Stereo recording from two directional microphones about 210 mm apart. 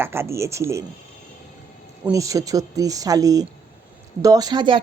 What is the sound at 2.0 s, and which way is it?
Speech, 15° right (ahead or behind).